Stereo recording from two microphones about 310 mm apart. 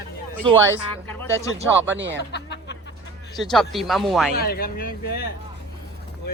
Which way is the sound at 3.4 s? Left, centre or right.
Centre.